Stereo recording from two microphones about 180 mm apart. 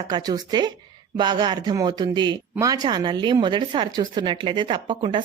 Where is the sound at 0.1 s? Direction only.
20° right (ahead or behind).